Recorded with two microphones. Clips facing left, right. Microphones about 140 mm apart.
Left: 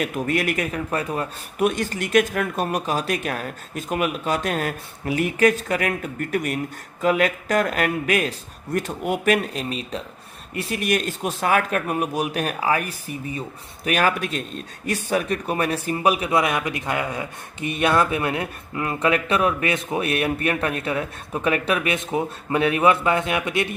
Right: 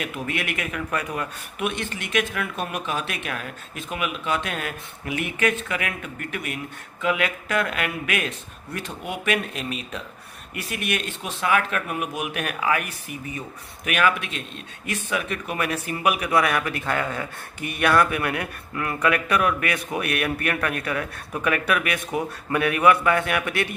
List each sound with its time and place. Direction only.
0.0 s speech: 40° left (ahead or behind); by 23.7 s 20° left (ahead or behind)